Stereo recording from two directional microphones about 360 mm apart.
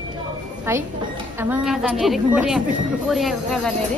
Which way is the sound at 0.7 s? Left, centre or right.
Centre.